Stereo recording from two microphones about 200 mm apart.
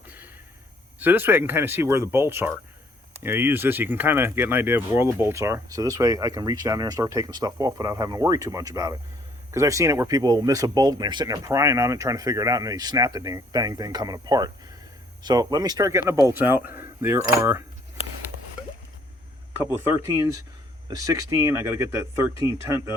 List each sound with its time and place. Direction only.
0.9 s speech: 10° right (ahead or behind)
19.7 s speech: 10° right (ahead or behind)